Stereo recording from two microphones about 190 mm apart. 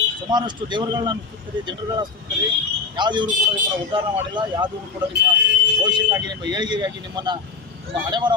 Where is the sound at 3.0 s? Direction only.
25° right (ahead or behind).